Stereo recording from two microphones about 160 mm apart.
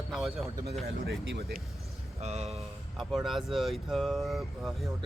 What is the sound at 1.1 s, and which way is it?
Speech, 80° right.